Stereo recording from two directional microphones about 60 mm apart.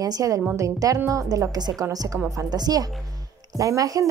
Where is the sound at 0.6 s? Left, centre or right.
Right.